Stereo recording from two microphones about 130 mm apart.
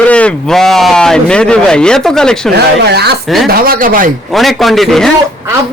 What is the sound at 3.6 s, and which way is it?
Speech, 90° right.